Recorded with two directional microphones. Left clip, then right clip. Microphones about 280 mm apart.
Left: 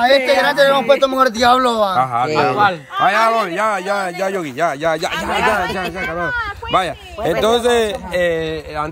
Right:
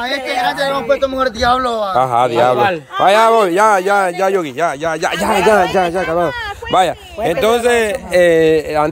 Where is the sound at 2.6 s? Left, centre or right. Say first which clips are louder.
Right 1 dB; right.